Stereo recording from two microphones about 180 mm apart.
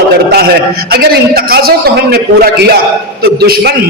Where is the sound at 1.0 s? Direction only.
55° right (ahead or behind).